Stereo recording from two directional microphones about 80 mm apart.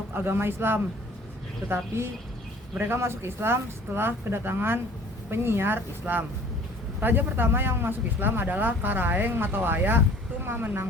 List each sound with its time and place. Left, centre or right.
0.1 s speech: right
2.7 s speech: right